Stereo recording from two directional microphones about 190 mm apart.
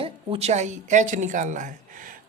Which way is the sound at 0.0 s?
30° right (ahead or behind).